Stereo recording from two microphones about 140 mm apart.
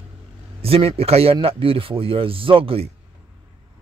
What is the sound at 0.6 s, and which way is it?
A man's voice, 45° right (ahead or behind).